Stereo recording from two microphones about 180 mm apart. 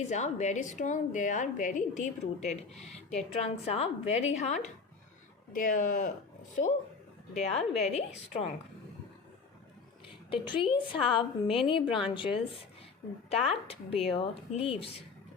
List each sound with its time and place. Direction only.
0.1 s a woman's voice: 40° left (ahead or behind)
7.3 s a woman's voice: 35° left (ahead or behind)
10.2 s a woman's voice: 30° left (ahead or behind)